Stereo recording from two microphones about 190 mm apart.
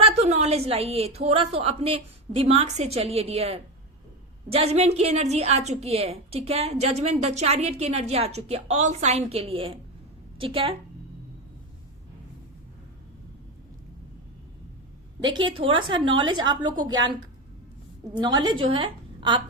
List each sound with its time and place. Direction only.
0.0 s a woman's voice: 35° right (ahead or behind)
15.2 s a woman's voice: 25° right (ahead or behind)
18.2 s a woman's voice: 20° right (ahead or behind)